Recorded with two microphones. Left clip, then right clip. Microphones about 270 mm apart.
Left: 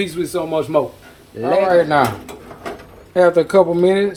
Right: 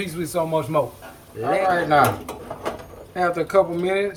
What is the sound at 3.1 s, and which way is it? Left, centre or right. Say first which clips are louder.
Speech: left 7 dB; left.